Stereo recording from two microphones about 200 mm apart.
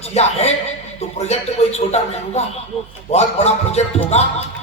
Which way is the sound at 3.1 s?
30° left (ahead or behind).